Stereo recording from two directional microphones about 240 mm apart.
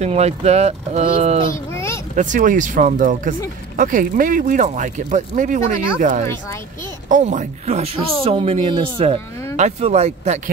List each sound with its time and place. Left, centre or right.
0.0 s speech: right